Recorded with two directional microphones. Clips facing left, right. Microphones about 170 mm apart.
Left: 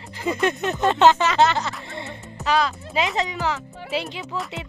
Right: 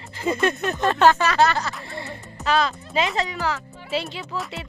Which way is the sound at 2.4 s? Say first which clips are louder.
Even; 10° left (ahead or behind).